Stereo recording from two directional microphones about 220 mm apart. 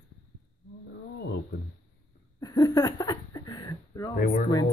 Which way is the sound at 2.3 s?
15° left (ahead or behind).